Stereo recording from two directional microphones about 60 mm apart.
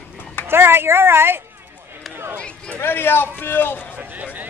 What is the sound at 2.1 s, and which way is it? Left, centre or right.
Run, right.